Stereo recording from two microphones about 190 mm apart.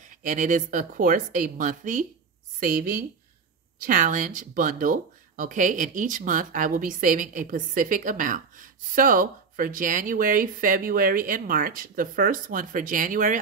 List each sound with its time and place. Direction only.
0.0 s speech: 40° right (ahead or behind)